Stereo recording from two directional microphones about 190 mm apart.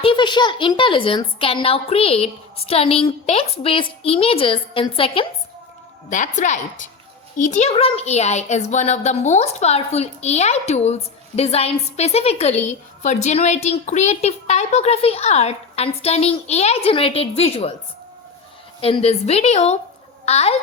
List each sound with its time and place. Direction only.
0.0 s a woman's voice: 25° left (ahead or behind)
6.1 s a woman's voice: 40° left (ahead or behind)
18.8 s a woman's voice: 30° left (ahead or behind)